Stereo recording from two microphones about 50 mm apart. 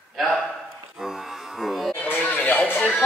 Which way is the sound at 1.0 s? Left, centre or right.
Centre.